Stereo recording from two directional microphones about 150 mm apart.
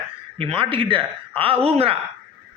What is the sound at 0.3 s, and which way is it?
Speech, 40° right (ahead or behind).